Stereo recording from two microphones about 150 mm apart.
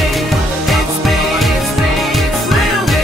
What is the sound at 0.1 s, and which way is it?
Music, centre (ahead or behind).